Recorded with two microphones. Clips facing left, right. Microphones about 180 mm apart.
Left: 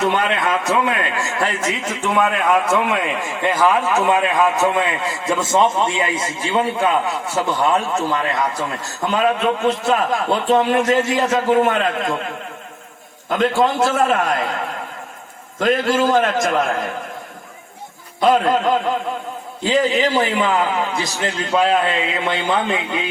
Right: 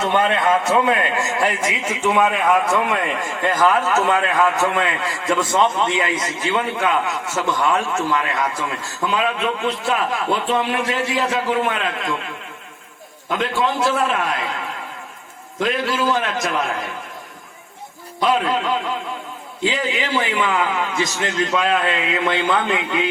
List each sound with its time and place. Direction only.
0.0 s a man's voice: 25° right (ahead or behind); by 12.3 s 45° left (ahead or behind)
13.4 s a man's voice: 45° left (ahead or behind)
18.2 s a man's voice: 45° left (ahead or behind); by 23.0 s 30° left (ahead or behind)